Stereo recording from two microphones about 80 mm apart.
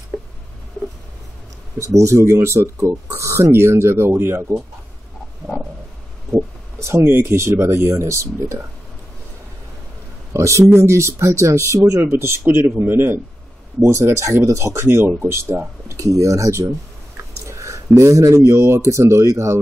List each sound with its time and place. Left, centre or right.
1.8 s speech: right
5.4 s a sound: right
6.3 s speech: right
10.3 s speech: right
13.7 s speech: right